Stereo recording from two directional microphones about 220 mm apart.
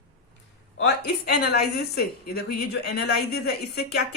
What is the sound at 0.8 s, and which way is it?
Speech, 50° left (ahead or behind).